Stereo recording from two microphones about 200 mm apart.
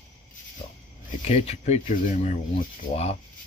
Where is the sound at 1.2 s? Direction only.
30° left (ahead or behind).